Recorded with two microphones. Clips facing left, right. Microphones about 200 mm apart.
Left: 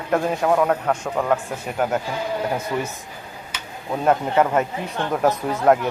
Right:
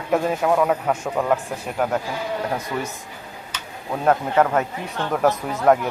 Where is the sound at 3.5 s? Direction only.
5° left (ahead or behind).